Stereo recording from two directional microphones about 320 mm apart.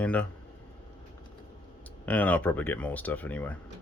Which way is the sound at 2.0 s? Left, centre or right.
Centre.